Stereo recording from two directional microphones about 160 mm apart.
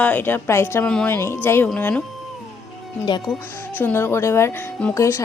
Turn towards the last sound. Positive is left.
turn(degrees=20)  # may be behind; listen again after turning